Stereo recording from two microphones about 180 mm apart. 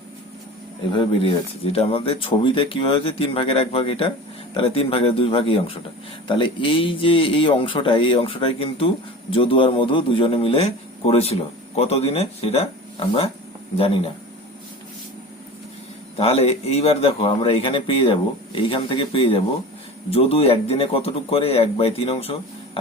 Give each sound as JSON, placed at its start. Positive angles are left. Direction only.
{"t": 0.9, "sound": "speech", "side_deg": 30}
{"t": 16.1, "sound": "speech", "side_deg": 35}